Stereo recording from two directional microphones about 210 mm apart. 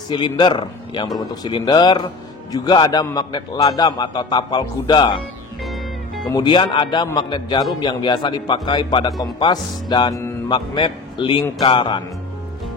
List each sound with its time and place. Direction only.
0.1 s speech: 20° left (ahead or behind)
6.3 s speech: 20° left (ahead or behind)